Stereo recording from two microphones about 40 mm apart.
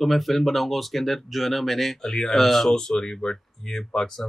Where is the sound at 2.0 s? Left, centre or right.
Centre.